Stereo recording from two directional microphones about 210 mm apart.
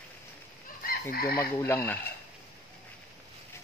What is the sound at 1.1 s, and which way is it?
Fowl, 45° left (ahead or behind).